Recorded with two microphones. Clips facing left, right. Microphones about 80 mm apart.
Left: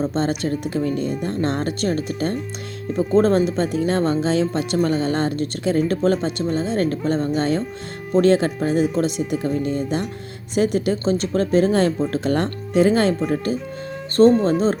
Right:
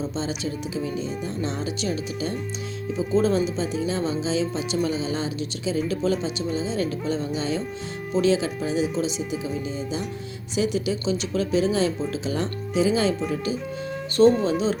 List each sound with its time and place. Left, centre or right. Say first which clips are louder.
0.0 s speech: left 7 dB; left
14.2 s speech: left 3 dB; left